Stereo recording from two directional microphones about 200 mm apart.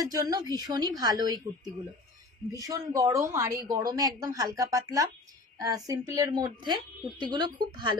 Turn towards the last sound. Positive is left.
turn(degrees=-20)  # may be behind; listen again after turning